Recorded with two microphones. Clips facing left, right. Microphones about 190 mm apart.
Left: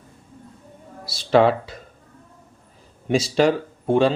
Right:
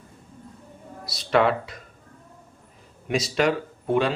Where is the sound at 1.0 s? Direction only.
30° left (ahead or behind).